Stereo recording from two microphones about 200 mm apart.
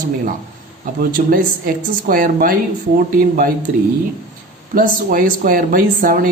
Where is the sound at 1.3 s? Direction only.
45° right (ahead or behind).